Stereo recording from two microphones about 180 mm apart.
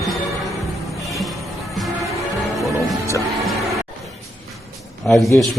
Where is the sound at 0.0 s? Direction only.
Centre (ahead or behind).